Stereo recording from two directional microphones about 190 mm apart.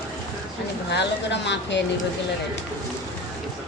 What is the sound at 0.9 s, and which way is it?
Speech, 65° left (ahead or behind).